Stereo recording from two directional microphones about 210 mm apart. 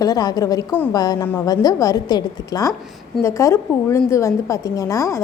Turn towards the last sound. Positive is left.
turn(degrees=15)  # may be behind; listen again after turning